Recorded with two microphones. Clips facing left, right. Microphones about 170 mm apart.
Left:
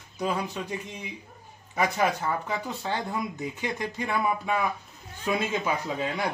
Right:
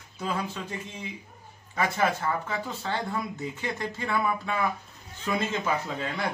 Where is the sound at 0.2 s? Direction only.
15° left (ahead or behind).